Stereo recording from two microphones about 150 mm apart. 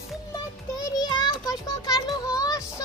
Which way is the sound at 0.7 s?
25° left (ahead or behind).